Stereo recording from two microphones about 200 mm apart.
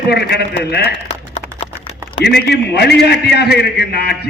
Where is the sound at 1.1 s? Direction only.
30° left (ahead or behind).